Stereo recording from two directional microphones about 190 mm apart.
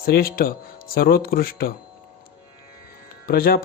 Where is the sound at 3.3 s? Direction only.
50° left (ahead or behind).